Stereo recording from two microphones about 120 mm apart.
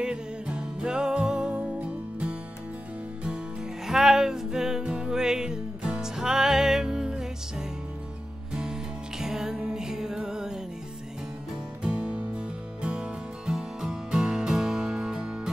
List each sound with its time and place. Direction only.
0.0 s music: 5° right (ahead or behind)
3.8 s music: 5° right (ahead or behind)
9.2 s music: 5° right (ahead or behind)
11.8 s music: 10° right (ahead or behind)